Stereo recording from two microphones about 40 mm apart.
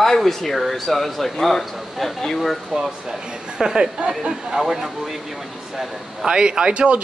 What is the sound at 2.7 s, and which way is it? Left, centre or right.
Speech, centre.